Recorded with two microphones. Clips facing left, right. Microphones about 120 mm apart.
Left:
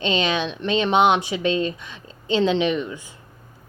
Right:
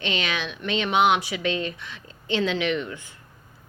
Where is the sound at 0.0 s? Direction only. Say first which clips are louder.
Left 6 dB; 25° left (ahead or behind).